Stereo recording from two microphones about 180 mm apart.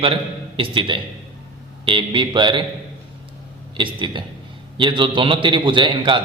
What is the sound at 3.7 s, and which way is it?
A man's voice, 25° right (ahead or behind).